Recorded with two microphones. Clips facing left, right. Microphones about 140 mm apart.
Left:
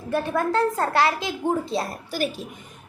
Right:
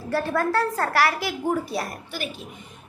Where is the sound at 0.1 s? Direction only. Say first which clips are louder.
Even; 15° left (ahead or behind).